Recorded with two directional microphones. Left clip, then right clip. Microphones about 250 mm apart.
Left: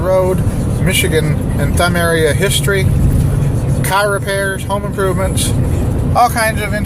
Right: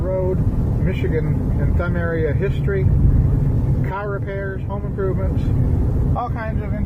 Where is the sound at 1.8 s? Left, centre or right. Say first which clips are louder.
Left 10 dB; centre.